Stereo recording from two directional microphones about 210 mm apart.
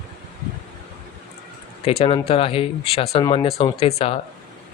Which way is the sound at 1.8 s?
30° left (ahead or behind).